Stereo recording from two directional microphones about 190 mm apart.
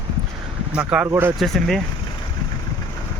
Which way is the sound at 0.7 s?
5° right (ahead or behind).